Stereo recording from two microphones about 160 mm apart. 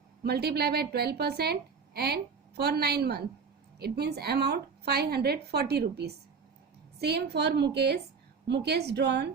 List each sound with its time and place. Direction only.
0.2 s a woman's voice: 80° right